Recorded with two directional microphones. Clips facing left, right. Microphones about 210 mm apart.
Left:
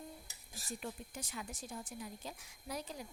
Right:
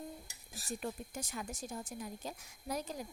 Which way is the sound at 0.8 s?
45° right (ahead or behind).